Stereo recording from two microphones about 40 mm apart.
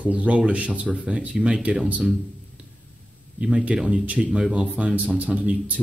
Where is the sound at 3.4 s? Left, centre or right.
Right.